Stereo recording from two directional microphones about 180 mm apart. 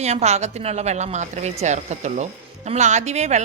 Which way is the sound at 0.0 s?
35° right (ahead or behind).